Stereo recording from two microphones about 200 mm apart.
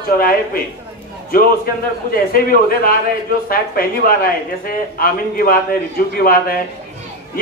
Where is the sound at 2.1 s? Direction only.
50° left (ahead or behind).